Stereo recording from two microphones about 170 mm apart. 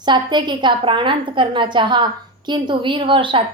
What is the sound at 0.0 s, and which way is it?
A woman's voice, 25° right (ahead or behind).